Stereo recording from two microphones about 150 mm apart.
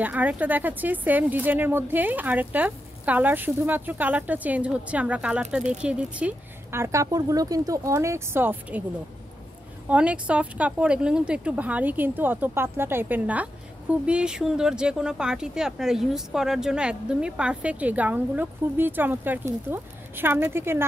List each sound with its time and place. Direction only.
0.0 s speech: 10° right (ahead or behind)
9.8 s speech: 10° right (ahead or behind)